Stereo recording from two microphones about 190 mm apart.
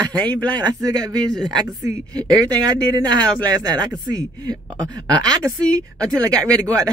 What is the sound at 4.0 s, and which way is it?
Speech, 20° right (ahead or behind).